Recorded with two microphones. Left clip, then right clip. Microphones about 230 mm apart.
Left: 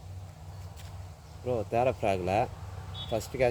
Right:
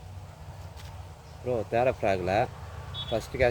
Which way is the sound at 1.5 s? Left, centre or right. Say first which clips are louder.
Right 2 dB; centre.